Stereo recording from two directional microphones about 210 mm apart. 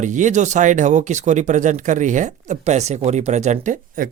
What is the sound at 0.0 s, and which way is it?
Speech, 35° right (ahead or behind).